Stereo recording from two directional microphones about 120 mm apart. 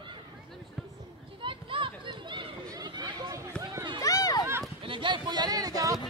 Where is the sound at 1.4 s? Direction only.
45° right (ahead or behind).